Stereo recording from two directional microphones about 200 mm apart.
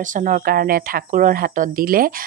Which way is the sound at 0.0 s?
40° right (ahead or behind).